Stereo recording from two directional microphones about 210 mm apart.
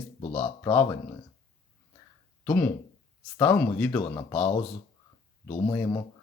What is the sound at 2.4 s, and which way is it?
Speech, 10° left (ahead or behind).